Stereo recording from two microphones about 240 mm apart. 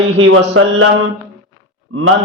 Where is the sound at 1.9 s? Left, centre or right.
Right.